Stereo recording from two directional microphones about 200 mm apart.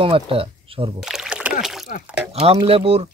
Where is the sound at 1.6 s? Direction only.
Centre (ahead or behind).